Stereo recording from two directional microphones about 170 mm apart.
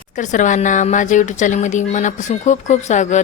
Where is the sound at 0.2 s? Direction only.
45° left (ahead or behind).